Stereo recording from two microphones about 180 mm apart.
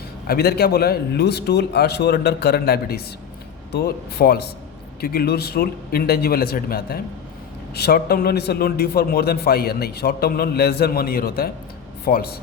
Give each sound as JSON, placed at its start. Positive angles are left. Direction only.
{"t": 0.3, "sound": "a man's voice", "side_deg": 60}